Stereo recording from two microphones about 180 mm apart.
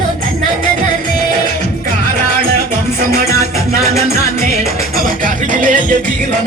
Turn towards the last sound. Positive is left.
turn(degrees=-45)  # may be behind; listen again after turning